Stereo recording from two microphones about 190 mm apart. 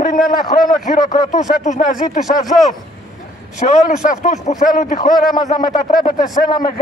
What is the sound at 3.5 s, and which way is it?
A man's voice, 40° left (ahead or behind).